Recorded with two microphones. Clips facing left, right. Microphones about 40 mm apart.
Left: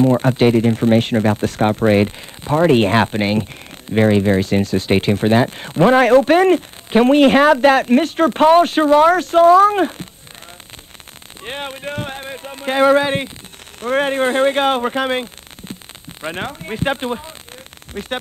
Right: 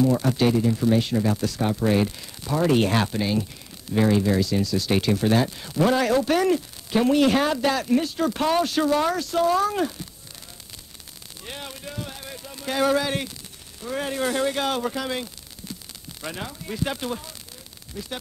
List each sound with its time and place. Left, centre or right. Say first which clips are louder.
0.0 s speech: left 7 dB; left
11.4 s speech: left 10 dB; left
13.7 s speech: left 10 dB; left
17.9 s speech: left 7 dB; left